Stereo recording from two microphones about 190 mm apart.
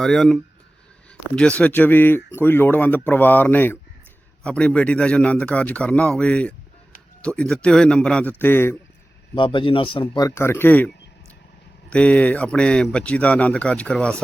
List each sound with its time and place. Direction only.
0.0 s speech: centre (ahead or behind)
1.4 s speech: 5° left (ahead or behind)
9.3 s a man's voice: 25° left (ahead or behind); by 14.2 s 5° left (ahead or behind)